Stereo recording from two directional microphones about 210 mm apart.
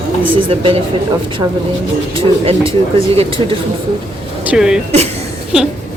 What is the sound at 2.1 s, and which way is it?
A woman's voice, 30° right (ahead or behind).